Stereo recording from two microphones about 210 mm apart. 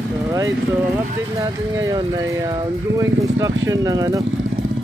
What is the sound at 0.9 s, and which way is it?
Speech, 15° right (ahead or behind).